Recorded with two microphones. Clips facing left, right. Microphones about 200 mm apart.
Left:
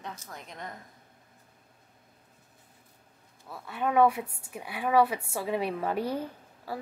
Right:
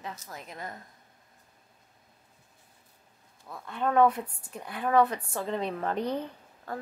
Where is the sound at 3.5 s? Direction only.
5° left (ahead or behind).